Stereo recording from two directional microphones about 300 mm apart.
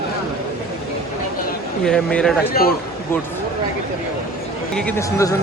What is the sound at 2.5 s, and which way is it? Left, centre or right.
Speech, left.